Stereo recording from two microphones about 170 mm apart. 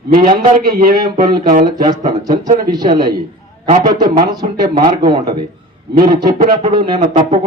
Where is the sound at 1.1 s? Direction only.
50° right (ahead or behind).